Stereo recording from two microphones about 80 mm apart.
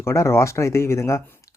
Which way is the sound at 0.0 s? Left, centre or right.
Left.